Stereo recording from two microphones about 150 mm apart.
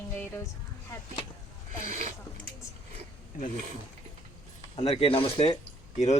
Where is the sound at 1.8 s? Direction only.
60° right (ahead or behind).